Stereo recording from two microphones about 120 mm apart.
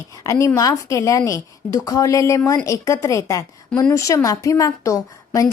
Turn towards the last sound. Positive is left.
turn(degrees=30)  # may be behind; listen again after turning